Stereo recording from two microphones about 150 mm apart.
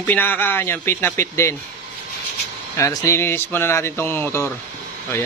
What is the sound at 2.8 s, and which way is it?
Speech, 20° left (ahead or behind).